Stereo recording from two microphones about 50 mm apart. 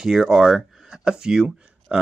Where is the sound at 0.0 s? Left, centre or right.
Centre.